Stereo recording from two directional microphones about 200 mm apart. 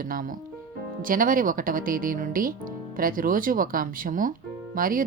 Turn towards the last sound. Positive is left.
turn(degrees=-45)  # may be behind; listen again after turning